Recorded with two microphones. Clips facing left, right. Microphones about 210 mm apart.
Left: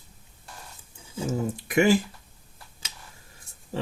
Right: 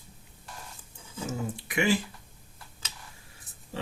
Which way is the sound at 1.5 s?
45° left (ahead or behind).